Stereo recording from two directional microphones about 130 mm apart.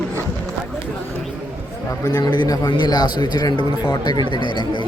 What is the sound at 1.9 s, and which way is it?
A man's voice, 30° left (ahead or behind).